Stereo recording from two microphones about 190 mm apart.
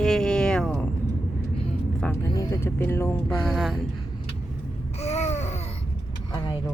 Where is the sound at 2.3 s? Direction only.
15° left (ahead or behind).